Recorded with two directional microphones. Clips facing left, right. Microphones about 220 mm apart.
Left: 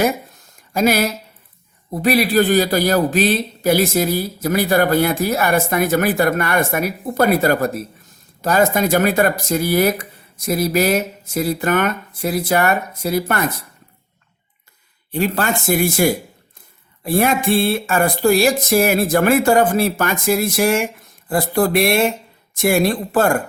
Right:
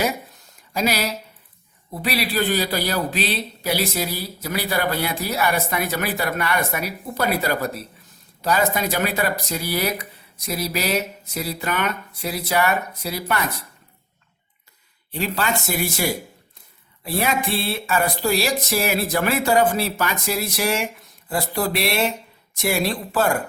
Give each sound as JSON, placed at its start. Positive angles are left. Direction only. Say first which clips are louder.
{"t": 0.7, "sound": "a man's voice", "louder": "left 6 dB", "side_deg": 50}
{"t": 15.1, "sound": "a man's voice", "louder": "left 5 dB", "side_deg": 50}